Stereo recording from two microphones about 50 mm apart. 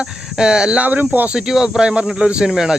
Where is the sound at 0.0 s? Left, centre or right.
Centre.